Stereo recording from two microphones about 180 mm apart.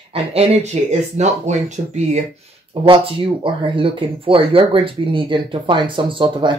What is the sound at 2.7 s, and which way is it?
Speech, 30° right (ahead or behind).